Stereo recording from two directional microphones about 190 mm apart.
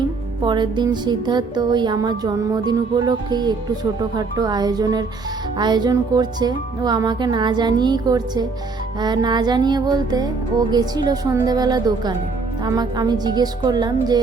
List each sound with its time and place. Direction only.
0.4 s music: 25° right (ahead or behind)